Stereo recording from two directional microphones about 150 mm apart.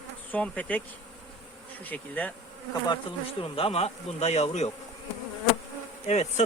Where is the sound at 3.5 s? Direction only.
40° left (ahead or behind).